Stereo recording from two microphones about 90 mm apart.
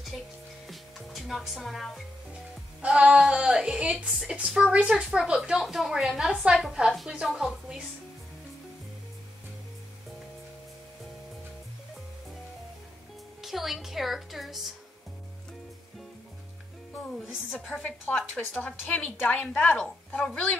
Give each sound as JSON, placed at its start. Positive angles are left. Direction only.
{"t": 0.1, "sound": "speech", "side_deg": 0}
{"t": 0.7, "sound": "music", "side_deg": 0}
{"t": 2.8, "sound": "a woman's voice", "side_deg": -10}
{"t": 13.4, "sound": "a woman's voice", "side_deg": 0}
{"t": 17.8, "sound": "a woman's voice", "side_deg": 15}